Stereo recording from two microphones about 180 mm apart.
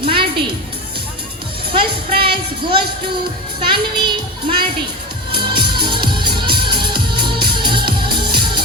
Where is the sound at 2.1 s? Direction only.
60° right (ahead or behind).